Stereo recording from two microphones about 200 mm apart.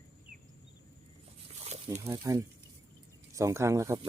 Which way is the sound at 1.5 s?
30° right (ahead or behind).